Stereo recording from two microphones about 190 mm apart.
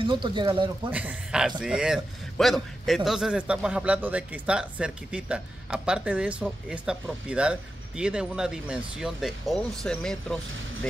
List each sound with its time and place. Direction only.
0.0 s speech: 25° right (ahead or behind)
0.8 s a man's voice: 5° right (ahead or behind)